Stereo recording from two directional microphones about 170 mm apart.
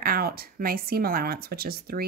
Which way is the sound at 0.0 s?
60° right (ahead or behind).